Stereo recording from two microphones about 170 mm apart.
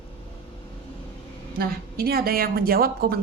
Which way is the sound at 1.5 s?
65° right (ahead or behind).